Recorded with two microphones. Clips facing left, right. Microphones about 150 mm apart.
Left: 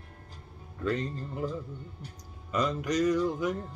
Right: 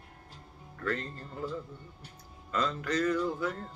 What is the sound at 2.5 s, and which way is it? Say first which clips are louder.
Speech: left 3 dB; 15° left (ahead or behind).